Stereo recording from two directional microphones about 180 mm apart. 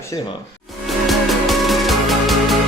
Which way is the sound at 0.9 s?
Centre (ahead or behind).